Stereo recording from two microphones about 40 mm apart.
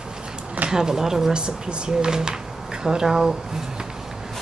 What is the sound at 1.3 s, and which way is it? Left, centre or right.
Speech, right.